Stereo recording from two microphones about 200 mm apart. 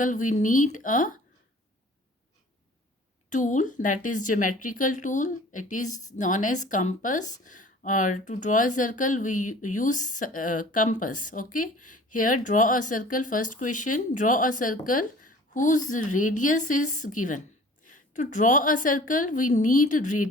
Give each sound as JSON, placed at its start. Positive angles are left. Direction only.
{"t": 0.0, "sound": "speech", "side_deg": 40}
{"t": 3.2, "sound": "speech", "side_deg": 40}